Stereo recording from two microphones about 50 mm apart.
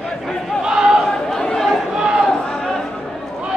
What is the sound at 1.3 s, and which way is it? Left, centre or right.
Chatter, centre.